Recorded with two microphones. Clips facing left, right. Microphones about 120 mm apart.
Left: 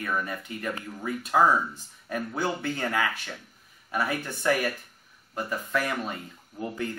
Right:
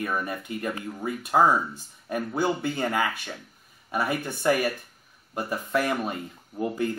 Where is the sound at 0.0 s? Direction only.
15° right (ahead or behind).